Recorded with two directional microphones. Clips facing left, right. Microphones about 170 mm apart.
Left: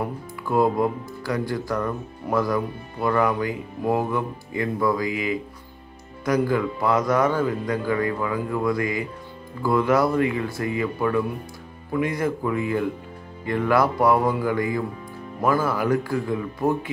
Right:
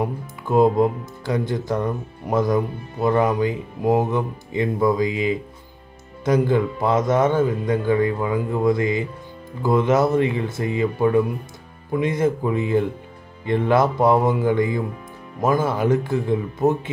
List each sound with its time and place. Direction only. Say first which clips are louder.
0.0 s speech: right 3 dB; 20° right (ahead or behind)